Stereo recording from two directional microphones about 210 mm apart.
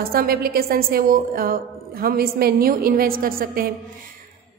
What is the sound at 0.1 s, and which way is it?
A woman's voice, 45° right (ahead or behind).